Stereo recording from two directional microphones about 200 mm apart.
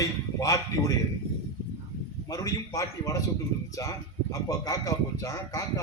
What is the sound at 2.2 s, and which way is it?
Speech, 15° left (ahead or behind).